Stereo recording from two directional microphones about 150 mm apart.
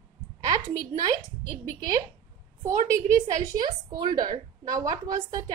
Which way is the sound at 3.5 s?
25° right (ahead or behind).